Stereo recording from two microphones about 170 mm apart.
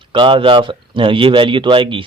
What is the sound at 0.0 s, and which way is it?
Speech, 30° right (ahead or behind).